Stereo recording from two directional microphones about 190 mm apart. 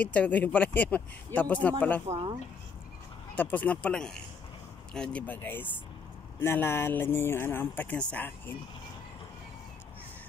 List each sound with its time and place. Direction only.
0.0 s speech: 5° left (ahead or behind)
2.0 s speech: 30° right (ahead or behind)
3.3 s speech: 10° left (ahead or behind)